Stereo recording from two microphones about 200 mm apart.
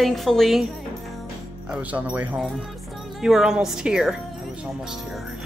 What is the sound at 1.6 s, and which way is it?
Speech, 5° right (ahead or behind).